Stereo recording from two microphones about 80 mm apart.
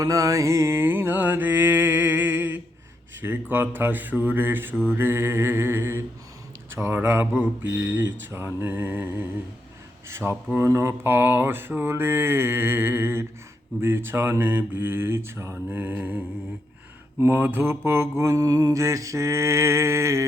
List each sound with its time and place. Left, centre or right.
0.0 s mantra: right
3.2 s speech: right
7.7 s mantra: right
8.3 s speech: right
15.5 s speech: right
17.2 s mantra: right